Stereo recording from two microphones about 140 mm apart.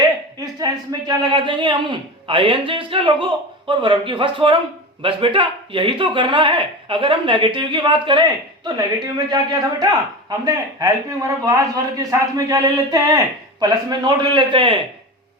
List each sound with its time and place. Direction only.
0.0 s speech: 30° right (ahead or behind)